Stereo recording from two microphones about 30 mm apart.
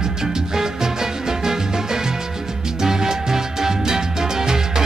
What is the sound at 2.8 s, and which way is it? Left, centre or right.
Music, centre.